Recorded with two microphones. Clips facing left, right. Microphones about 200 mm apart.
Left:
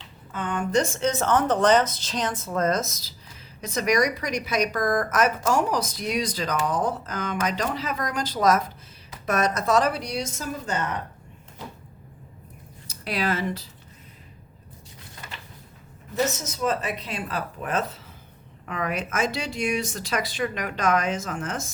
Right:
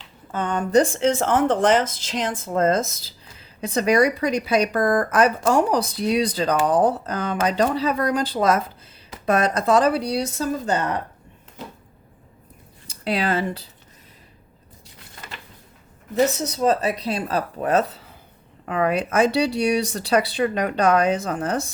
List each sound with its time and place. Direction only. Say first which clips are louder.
0.3 s speech: right 4 dB; 40° right (ahead or behind)
12.9 s speech: right 4 dB; 30° right (ahead or behind)
16.5 s speech: right 6 dB; 35° right (ahead or behind)